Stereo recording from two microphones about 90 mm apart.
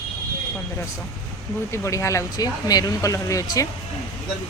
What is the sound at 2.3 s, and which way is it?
Speech, 45° left (ahead or behind).